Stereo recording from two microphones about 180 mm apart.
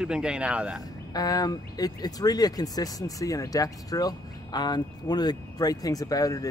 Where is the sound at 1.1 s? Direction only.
20° left (ahead or behind).